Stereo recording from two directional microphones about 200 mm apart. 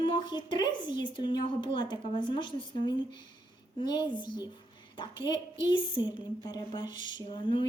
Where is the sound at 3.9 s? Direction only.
25° left (ahead or behind).